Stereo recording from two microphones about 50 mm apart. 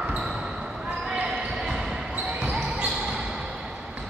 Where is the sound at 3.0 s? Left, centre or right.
Centre.